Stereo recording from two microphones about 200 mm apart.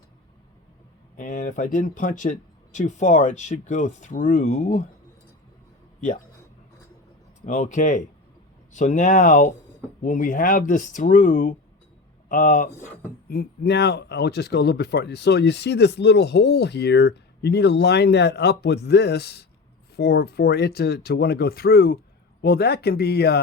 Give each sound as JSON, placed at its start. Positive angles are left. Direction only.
{"t": 1.1, "sound": "speech", "side_deg": 40}
{"t": 7.4, "sound": "speech", "side_deg": 40}